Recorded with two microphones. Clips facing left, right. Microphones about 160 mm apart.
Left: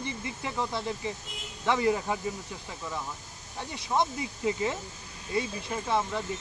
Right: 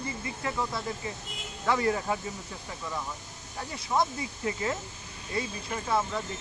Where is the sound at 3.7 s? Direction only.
20° left (ahead or behind).